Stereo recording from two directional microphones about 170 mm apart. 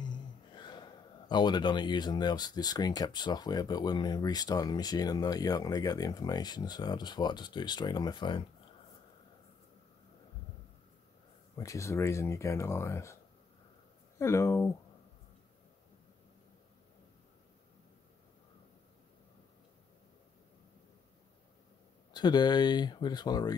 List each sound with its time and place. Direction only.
0.0 s gasp: 25° left (ahead or behind)
1.3 s speech: 25° left (ahead or behind)
11.5 s speech: 20° left (ahead or behind)
22.1 s speech: 25° left (ahead or behind)